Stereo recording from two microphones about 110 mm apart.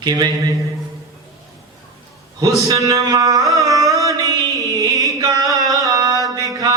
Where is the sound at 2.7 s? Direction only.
30° right (ahead or behind).